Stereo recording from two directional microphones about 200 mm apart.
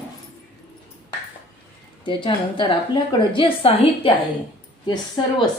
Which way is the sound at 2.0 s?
25° left (ahead or behind).